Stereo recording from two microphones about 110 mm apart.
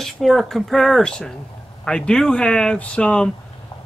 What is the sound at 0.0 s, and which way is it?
Speech, centre (ahead or behind).